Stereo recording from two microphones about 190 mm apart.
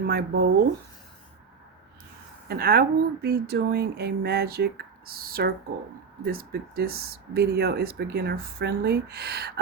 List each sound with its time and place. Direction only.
0.0 s speech: 50° right (ahead or behind)
2.5 s speech: 55° right (ahead or behind)